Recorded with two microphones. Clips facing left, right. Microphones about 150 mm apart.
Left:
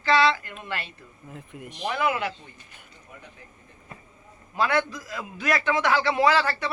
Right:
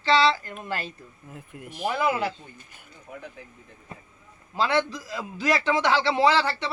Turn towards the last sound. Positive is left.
turn(degrees=-25)  # may be behind; listen again after turning